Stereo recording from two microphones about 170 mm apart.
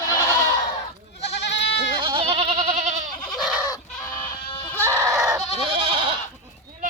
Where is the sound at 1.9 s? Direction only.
30° right (ahead or behind).